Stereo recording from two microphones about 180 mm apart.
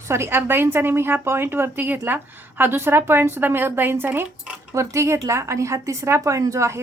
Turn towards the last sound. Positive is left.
turn(degrees=-15)  # may be behind; listen again after turning